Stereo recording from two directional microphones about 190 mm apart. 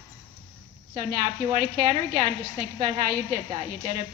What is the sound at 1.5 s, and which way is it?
A woman's voice, 40° right (ahead or behind).